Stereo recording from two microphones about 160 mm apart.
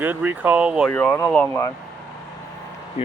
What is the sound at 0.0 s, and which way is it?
Speech, 10° right (ahead or behind).